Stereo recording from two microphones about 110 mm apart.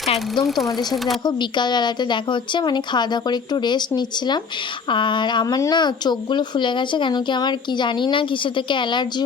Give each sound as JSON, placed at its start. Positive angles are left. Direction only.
{"t": 0.4, "sound": "speech", "side_deg": 0}
{"t": 1.2, "sound": "speech", "side_deg": 40}